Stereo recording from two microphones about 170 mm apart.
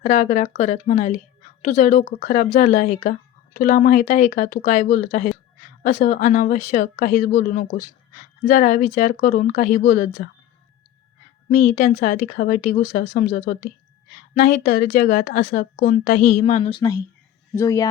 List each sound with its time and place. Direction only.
0.0 s a woman's voice: 50° left (ahead or behind)
11.4 s a woman's voice: 50° left (ahead or behind)
16.6 s speech: 30° left (ahead or behind)